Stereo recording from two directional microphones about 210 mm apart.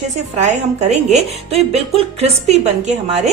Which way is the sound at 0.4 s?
35° right (ahead or behind).